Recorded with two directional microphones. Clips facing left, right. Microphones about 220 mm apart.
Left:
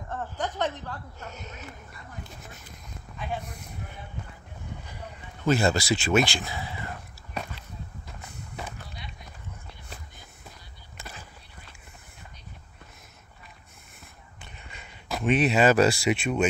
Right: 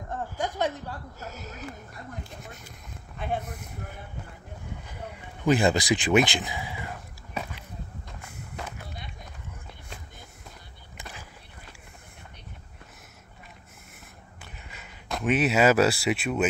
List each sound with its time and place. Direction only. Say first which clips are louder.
0.1 s speech: right 1 dB; 10° right (ahead or behind)
5.4 s speech: right 1 dB; 15° right (ahead or behind)
14.4 s a sound: even; 5° right (ahead or behind)